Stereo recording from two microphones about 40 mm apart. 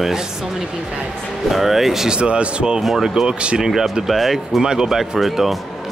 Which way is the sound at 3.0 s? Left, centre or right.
Centre.